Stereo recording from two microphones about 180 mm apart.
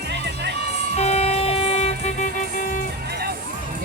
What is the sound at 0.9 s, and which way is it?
Vehicle, 35° left (ahead or behind).